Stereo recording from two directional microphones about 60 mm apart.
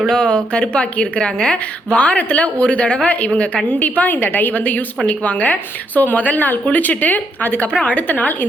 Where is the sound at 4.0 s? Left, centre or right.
Left.